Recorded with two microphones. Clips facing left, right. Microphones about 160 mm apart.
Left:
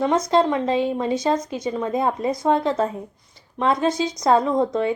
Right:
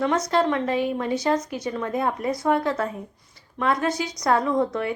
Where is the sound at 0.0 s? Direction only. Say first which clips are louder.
Left 3 dB; 20° left (ahead or behind).